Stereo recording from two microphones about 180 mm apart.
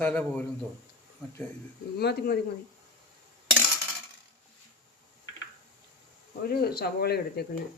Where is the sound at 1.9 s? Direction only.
60° left (ahead or behind).